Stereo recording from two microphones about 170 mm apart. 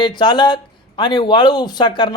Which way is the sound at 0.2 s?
25° left (ahead or behind).